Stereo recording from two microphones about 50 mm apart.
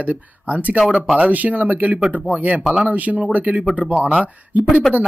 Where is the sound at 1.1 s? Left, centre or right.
Right.